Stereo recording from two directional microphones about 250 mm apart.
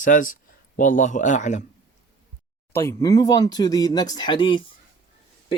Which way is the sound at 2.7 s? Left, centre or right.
Centre.